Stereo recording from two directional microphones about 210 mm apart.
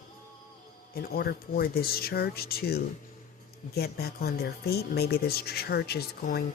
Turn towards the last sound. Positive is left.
turn(degrees=50)  # may be behind; listen again after turning